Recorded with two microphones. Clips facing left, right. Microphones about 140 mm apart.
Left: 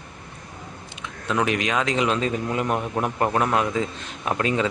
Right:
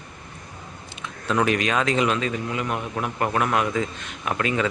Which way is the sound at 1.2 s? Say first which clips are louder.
Right 1 dB; 20° left (ahead or behind).